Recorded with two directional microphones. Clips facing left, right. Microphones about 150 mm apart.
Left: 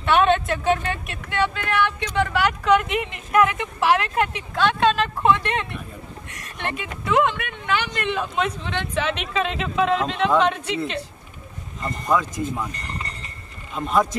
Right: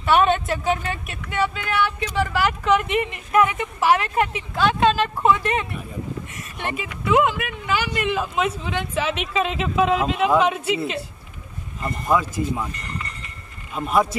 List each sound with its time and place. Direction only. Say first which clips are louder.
0.0 s speech: even; 5° right (ahead or behind)
12.7 s speech: even; 30° left (ahead or behind)
13.7 s speech: right 1 dB; 5° right (ahead or behind)